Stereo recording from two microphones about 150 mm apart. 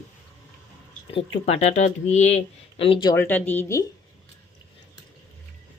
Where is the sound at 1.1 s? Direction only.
40° left (ahead or behind).